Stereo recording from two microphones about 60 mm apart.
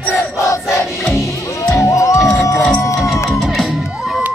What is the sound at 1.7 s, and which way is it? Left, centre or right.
Music, left.